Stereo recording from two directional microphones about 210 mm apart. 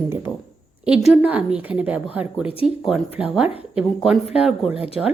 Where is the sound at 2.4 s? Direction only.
25° left (ahead or behind).